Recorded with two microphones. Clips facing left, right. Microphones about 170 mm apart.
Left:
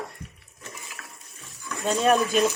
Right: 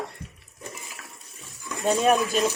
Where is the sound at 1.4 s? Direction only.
Centre (ahead or behind).